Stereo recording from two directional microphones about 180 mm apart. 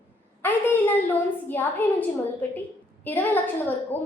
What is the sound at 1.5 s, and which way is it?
A woman's voice, 10° left (ahead or behind).